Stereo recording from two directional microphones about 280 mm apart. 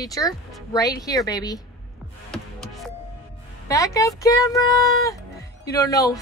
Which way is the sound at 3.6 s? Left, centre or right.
Centre.